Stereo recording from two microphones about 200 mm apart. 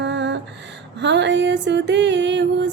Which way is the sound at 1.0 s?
60° right (ahead or behind).